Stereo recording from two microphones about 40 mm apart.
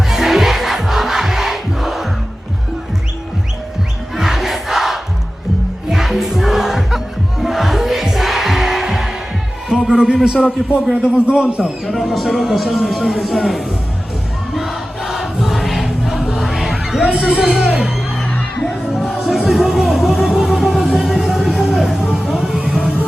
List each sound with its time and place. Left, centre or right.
0.1 s crowd: centre
4.1 s crowd: centre
5.9 s music: centre
9.6 s a sound: centre
10.6 s a man's voice: right
12.0 s speech: centre
14.5 s choir: centre
17.2 s a man's voice: centre
18.9 s music: centre